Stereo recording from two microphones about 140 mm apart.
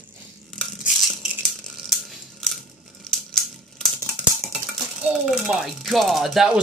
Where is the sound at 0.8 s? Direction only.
5° right (ahead or behind).